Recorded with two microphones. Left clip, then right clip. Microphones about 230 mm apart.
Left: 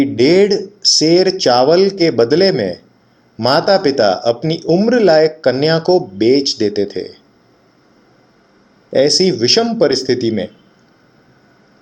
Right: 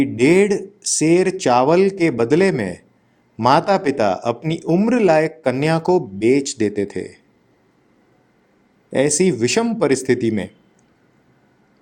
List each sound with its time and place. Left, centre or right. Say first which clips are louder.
0.0 s speech: left 4 dB; right
8.9 s speech: left 5 dB; right